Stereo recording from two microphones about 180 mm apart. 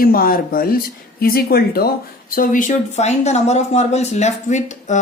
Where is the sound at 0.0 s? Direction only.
55° left (ahead or behind).